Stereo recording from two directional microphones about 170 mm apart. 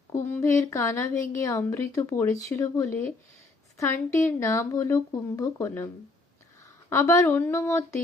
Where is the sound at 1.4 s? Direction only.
15° left (ahead or behind).